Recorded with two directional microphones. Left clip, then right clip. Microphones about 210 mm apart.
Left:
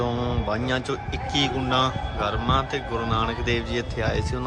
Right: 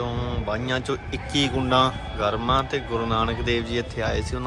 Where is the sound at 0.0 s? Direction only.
15° left (ahead or behind).